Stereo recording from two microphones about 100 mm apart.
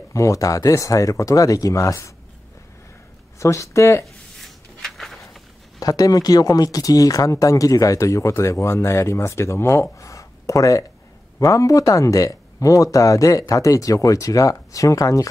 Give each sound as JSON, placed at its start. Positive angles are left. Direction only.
{"t": 0.1, "sound": "speech", "side_deg": 35}
{"t": 3.3, "sound": "speech", "side_deg": 30}
{"t": 4.0, "sound": "a sound", "side_deg": 0}
{"t": 5.8, "sound": "speech", "side_deg": 40}
{"t": 9.9, "sound": "a sound", "side_deg": 30}
{"t": 11.3, "sound": "speech", "side_deg": 35}